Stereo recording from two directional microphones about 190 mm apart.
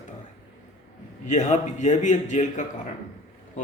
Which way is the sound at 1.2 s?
40° left (ahead or behind).